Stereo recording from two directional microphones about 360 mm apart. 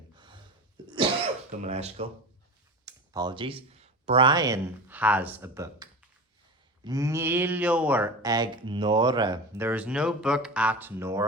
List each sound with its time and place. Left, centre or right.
1.5 s speech: centre
2.8 s a sound: centre
4.0 s speech: centre